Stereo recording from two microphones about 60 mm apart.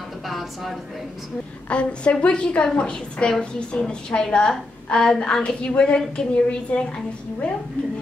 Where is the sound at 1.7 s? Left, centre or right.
Centre.